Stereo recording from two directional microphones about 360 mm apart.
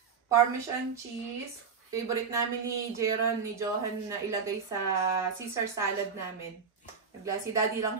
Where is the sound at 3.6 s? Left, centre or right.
Centre.